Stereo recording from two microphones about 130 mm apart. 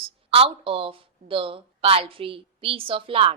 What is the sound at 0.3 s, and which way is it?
Speech, 45° right (ahead or behind).